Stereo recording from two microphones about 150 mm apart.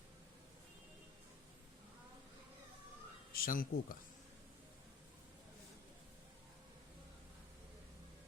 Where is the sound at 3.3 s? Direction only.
75° left (ahead or behind).